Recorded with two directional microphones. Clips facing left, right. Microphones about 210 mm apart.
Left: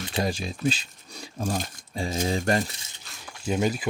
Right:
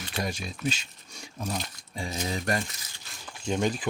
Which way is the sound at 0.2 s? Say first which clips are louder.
Left 5 dB; 30° left (ahead or behind).